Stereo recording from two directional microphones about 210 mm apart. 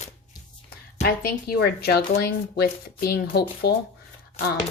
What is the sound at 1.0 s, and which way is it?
Speech, 50° left (ahead or behind).